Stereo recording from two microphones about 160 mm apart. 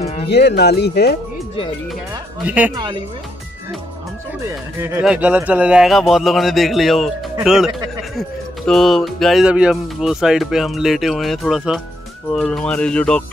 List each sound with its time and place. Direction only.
0.0 s music: 40° left (ahead or behind)
0.3 s speech: 90° left
2.4 s speech: 10° right (ahead or behind)
2.7 s speech: 30° right (ahead or behind)
4.4 s speech: 15° right (ahead or behind)
5.0 s speech: 5° right (ahead or behind)